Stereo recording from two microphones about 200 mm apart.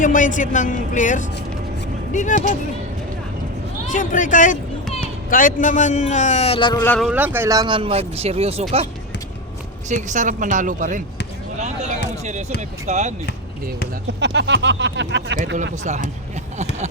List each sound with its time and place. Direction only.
0.0 s speech: 40° left (ahead or behind)
3.9 s speech: 40° left (ahead or behind); by 6.8 s 25° left (ahead or behind)
6.8 s speech: 10° left (ahead or behind)
7.1 s speech: 10° right (ahead or behind); by 8.6 s 30° right (ahead or behind)
9.9 s a woman's voice: 40° right (ahead or behind)
14.2 s speech: 60° right (ahead or behind)
15.5 s a woman's voice: 35° right (ahead or behind)